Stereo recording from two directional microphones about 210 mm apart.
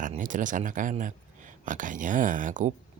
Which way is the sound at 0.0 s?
40° right (ahead or behind).